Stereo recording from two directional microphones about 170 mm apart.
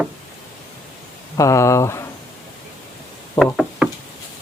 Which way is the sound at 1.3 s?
20° left (ahead or behind).